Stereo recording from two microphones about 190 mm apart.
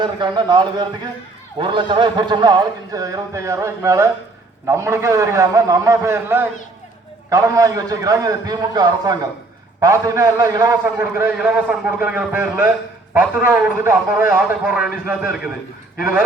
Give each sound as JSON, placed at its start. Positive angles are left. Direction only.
{"t": 0.0, "sound": "a man's voice", "side_deg": -25}